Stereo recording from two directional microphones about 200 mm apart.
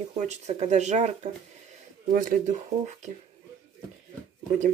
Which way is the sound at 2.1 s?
40° right (ahead or behind).